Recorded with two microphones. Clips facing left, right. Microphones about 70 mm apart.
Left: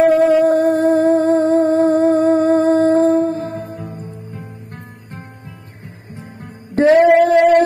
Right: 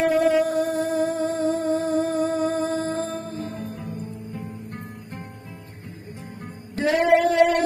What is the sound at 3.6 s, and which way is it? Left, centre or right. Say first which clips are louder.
Music: left 4 dB; left.